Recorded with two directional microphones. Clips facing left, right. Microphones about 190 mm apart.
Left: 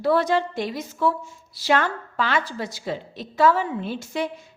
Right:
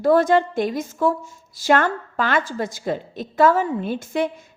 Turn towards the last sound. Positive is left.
turn(degrees=-50)  # may be behind; listen again after turning